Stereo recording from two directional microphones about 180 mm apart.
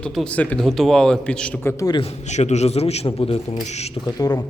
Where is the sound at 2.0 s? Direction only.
40° left (ahead or behind).